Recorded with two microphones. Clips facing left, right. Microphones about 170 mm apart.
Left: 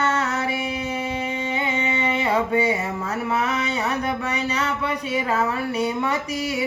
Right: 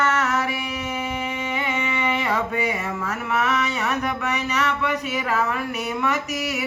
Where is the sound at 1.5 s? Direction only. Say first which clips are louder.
Left 2 dB; 30° left (ahead or behind).